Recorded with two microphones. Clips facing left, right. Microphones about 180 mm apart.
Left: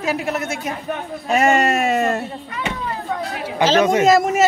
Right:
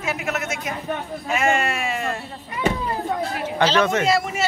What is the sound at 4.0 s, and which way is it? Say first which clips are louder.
Speech: left 7 dB; 45° left (ahead or behind).